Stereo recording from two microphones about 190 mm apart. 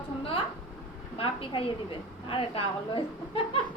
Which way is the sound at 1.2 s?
30° left (ahead or behind).